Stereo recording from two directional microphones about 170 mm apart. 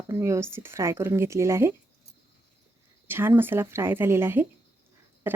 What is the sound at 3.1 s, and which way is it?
Speech, 10° right (ahead or behind).